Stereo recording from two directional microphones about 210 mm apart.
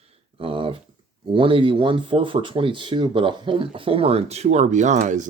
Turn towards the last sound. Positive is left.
turn(degrees=-35)  # may be behind; listen again after turning